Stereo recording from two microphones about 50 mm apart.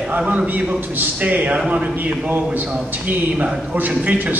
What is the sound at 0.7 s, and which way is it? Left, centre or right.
A man's voice, right.